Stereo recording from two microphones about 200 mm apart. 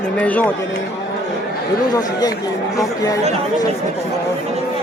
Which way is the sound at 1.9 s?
20° left (ahead or behind).